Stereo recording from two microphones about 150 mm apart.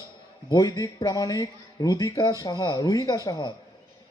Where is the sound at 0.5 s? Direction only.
25° left (ahead or behind).